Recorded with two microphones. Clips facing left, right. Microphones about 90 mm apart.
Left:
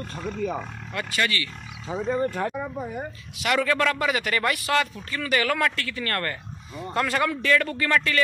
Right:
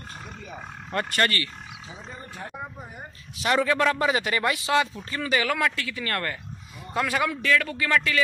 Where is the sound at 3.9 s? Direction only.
30° right (ahead or behind).